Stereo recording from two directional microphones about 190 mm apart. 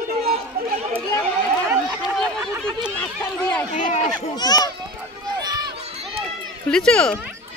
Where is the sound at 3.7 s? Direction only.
45° left (ahead or behind).